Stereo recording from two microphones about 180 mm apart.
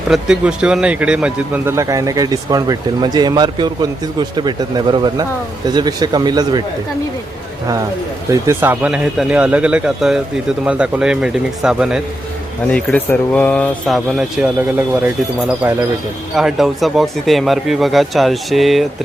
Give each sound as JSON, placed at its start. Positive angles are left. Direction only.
{"t": 0.1, "sound": "a man's voice", "side_deg": -5}
{"t": 8.3, "sound": "speech", "side_deg": -15}
{"t": 12.7, "sound": "speech", "side_deg": 5}
{"t": 16.3, "sound": "speech", "side_deg": 0}